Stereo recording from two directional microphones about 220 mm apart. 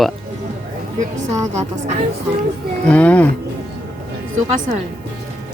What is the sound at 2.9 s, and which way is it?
Speech, 5° left (ahead or behind).